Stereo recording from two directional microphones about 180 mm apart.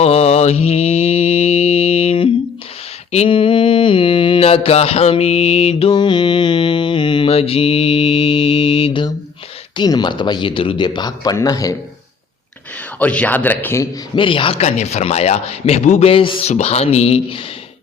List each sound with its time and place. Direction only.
0.0 s mantra: 35° left (ahead or behind)
9.7 s speech: 25° left (ahead or behind)
13.0 s speech: 10° left (ahead or behind)
14.2 s speech: 30° left (ahead or behind)